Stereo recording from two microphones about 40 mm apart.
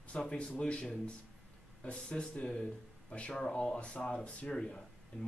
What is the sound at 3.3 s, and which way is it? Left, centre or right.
Speech, left.